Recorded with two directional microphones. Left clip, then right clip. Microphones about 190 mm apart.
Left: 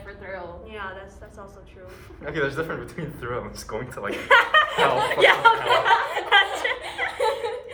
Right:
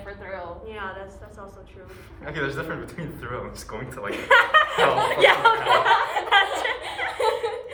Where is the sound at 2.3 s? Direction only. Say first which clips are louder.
Left 2 dB; 15° left (ahead or behind).